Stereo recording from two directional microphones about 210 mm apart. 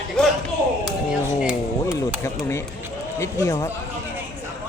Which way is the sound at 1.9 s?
5° right (ahead or behind).